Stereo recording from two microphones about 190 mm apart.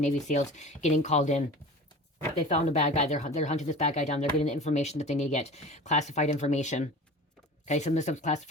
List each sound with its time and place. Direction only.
0.0 s speech: 40° left (ahead or behind)
2.5 s speech: 35° left (ahead or behind)